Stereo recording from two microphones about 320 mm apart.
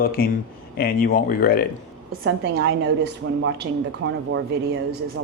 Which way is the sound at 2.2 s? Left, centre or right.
Right.